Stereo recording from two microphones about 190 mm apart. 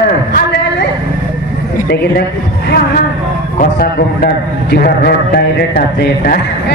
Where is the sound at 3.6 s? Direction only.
50° left (ahead or behind).